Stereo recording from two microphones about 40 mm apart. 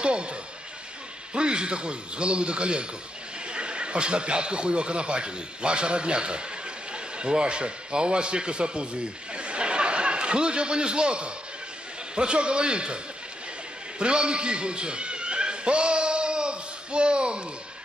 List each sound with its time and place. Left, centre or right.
0.0 s a man's voice: right
13.9 s cat: right